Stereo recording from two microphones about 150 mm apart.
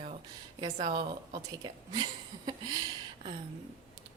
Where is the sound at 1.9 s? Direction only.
30° right (ahead or behind).